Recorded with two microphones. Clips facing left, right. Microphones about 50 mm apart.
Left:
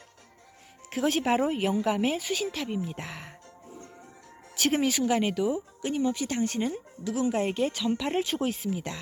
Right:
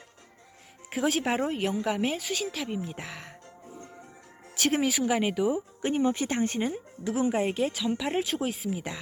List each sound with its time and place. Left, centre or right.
0.9 s a woman's voice: centre
4.5 s speech: centre
5.8 s speech: right
6.6 s speech: centre
7.0 s speech: right
7.3 s a woman's voice: centre